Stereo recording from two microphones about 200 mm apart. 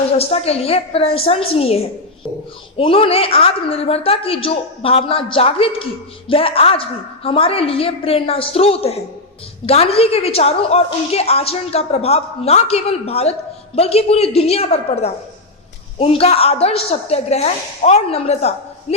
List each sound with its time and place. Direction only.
0.2 s a woman's voice: 30° left (ahead or behind)